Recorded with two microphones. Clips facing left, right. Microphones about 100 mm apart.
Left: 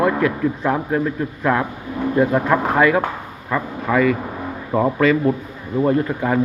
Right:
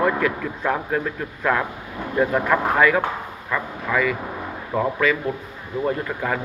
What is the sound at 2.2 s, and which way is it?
A man's voice, 25° left (ahead or behind).